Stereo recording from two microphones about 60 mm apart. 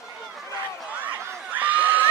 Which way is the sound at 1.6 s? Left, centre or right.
Right.